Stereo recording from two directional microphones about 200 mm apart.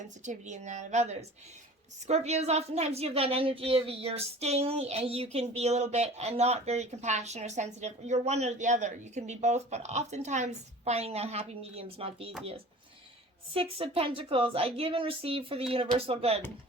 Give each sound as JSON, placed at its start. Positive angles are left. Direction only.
{"t": 0.2, "sound": "a woman's voice", "side_deg": -35}
{"t": 13.5, "sound": "a woman's voice", "side_deg": -25}